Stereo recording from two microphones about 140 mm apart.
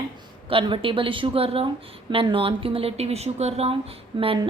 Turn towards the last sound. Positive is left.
turn(degrees=-35)  # may be behind; listen again after turning